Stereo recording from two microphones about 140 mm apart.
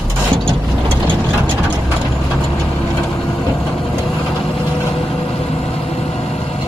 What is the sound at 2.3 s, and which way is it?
Vehicle, 5° left (ahead or behind).